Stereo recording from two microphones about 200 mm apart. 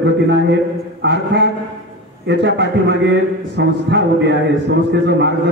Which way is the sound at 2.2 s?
60° right (ahead or behind).